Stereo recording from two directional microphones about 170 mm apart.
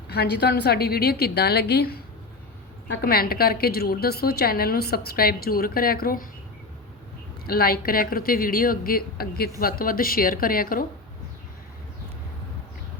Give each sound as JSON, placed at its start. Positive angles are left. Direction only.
{"t": 0.1, "sound": "a woman's voice", "side_deg": 70}
{"t": 3.0, "sound": "a woman's voice", "side_deg": 65}
{"t": 7.4, "sound": "a woman's voice", "side_deg": 60}